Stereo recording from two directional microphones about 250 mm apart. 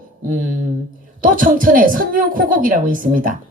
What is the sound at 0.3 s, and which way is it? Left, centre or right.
A woman's voice, right.